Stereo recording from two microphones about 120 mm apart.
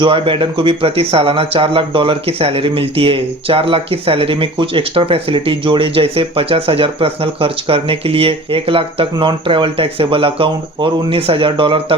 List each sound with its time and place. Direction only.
0.0 s speech: 45° right (ahead or behind)